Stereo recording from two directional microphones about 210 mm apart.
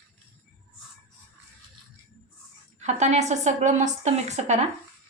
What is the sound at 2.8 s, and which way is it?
A woman's voice, 35° right (ahead or behind).